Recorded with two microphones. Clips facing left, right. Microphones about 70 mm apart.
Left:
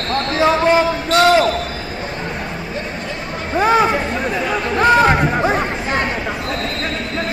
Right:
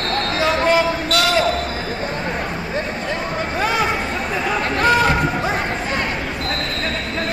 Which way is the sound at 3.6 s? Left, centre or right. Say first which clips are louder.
Left 7 dB; left.